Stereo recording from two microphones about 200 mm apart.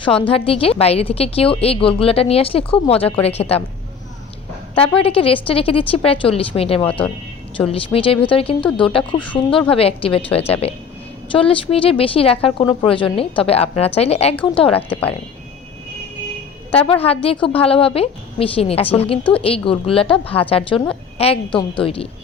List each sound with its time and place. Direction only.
0.0 s a woman's voice: 25° left (ahead or behind)
4.9 s a woman's voice: 30° left (ahead or behind)
16.7 s a woman's voice: 30° left (ahead or behind)